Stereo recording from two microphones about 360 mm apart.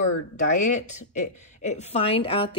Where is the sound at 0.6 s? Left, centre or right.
Centre.